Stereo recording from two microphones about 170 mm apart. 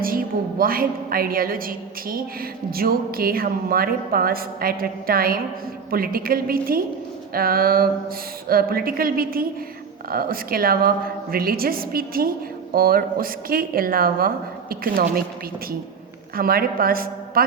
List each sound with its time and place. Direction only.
0.0 s a woman's voice: 60° right (ahead or behind)
16.3 s a woman's voice: 60° right (ahead or behind)